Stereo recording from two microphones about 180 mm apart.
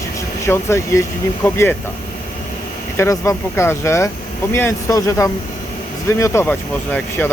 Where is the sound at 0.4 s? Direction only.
15° left (ahead or behind).